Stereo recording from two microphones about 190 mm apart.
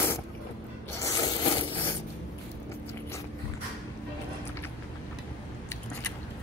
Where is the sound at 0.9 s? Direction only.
20° left (ahead or behind).